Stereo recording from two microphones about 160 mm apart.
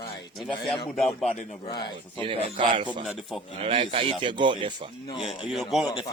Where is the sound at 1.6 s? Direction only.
25° left (ahead or behind).